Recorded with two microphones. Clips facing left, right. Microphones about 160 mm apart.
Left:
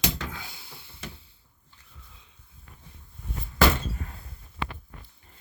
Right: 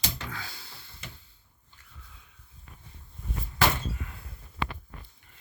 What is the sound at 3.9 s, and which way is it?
Door, 40° left (ahead or behind).